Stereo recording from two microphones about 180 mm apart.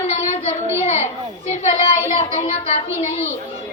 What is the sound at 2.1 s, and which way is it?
Speech, 40° left (ahead or behind).